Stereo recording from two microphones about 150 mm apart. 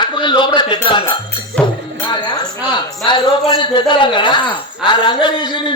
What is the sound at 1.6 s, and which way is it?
Music, 30° left (ahead or behind).